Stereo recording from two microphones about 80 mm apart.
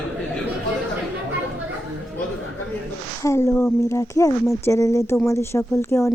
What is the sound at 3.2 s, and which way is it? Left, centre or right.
Speech, left.